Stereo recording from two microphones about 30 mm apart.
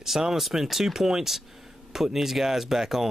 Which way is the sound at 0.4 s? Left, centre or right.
Centre.